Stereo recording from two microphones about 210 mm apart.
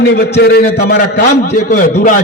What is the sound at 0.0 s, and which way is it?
A man's voice, 50° left (ahead or behind).